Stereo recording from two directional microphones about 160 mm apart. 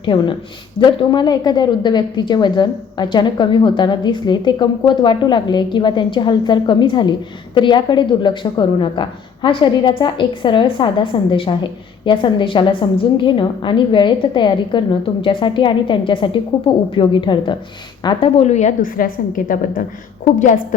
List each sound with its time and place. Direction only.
0.0 s a woman's voice: 30° left (ahead or behind); by 19.8 s 60° left (ahead or behind)
20.4 s a woman's voice: 50° left (ahead or behind)